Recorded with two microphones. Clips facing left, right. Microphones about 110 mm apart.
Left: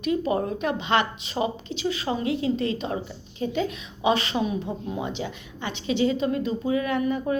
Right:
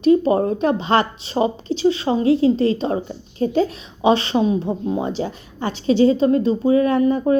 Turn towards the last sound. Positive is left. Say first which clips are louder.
# right 8 dB
turn(degrees=-35)  # may be behind; listen again after turning